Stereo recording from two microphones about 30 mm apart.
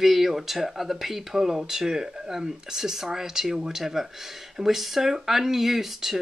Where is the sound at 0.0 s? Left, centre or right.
Centre.